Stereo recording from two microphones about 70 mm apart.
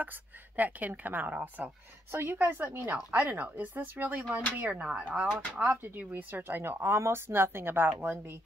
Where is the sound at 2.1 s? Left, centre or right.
Right; by 5.0 s centre.